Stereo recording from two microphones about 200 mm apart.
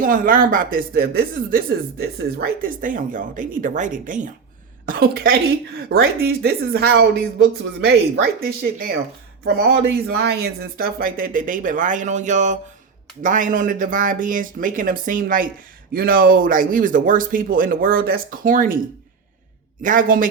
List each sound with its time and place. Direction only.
0.0 s a woman's voice: 40° right (ahead or behind)
19.8 s speech: 40° right (ahead or behind)